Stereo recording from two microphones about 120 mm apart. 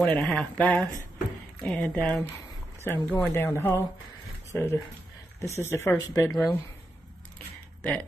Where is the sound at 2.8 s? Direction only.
20° left (ahead or behind).